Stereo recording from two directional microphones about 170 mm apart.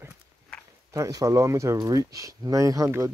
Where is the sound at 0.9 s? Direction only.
20° right (ahead or behind).